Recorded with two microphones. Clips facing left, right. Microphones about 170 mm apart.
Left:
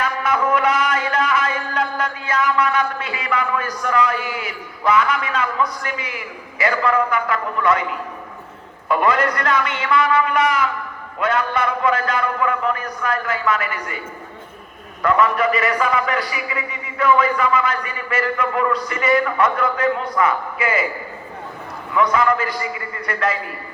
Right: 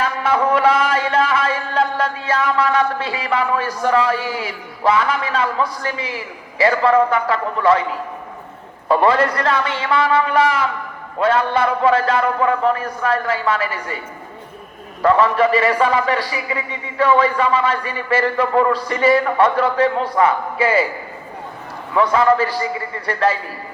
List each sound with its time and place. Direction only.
0.0 s a man's voice: 30° right (ahead or behind)
8.9 s a man's voice: 30° right (ahead or behind)
15.0 s a man's voice: 30° right (ahead or behind)
21.9 s a man's voice: 30° right (ahead or behind)